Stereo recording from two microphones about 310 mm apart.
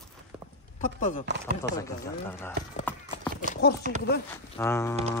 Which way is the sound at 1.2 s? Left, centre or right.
Right.